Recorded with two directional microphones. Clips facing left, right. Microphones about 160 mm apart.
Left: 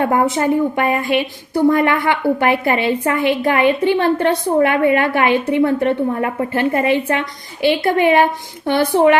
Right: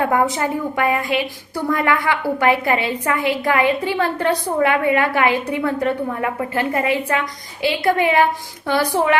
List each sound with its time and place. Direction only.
0.1 s a woman's voice: 25° left (ahead or behind)